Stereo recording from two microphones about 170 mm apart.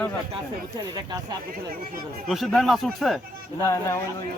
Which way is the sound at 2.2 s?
Centre (ahead or behind).